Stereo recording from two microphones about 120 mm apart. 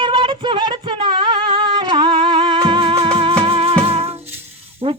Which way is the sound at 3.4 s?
50° right (ahead or behind).